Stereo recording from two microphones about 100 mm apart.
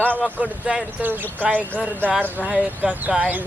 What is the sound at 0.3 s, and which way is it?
Speech, 15° right (ahead or behind).